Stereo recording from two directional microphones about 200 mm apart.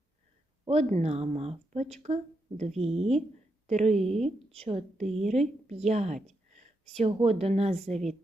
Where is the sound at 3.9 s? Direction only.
Centre (ahead or behind).